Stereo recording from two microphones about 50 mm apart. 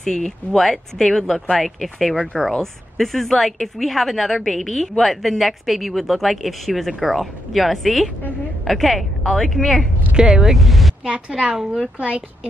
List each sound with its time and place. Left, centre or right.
0.0 s speech: centre
10.1 s speech: centre
10.4 s speech: centre